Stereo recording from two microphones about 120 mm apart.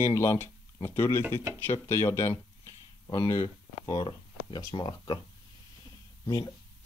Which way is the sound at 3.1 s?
40° left (ahead or behind).